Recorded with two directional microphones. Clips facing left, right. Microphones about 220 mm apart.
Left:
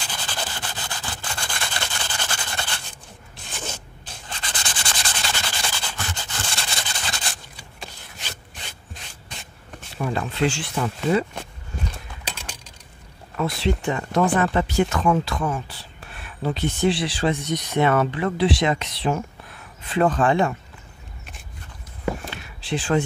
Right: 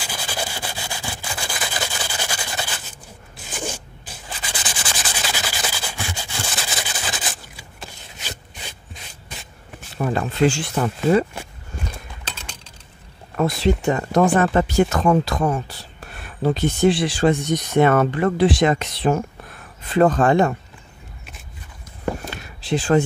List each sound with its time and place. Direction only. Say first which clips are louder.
0.0 s rub: right 3 dB; 10° right (ahead or behind)
3.5 s zipper: right 5 dB; 10° right (ahead or behind)
4.3 s sanding: right 2 dB; 10° right (ahead or behind)
9.9 s speech: right 4 dB; 40° right (ahead or behind)
12.3 s mechanisms: left 2 dB; 10° left (ahead or behind)
13.4 s speech: right 4 dB; 45° right (ahead or behind)
22.2 s a sound: right 2 dB; 45° right (ahead or behind)